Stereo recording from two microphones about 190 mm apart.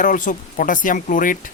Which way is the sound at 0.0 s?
45° left (ahead or behind).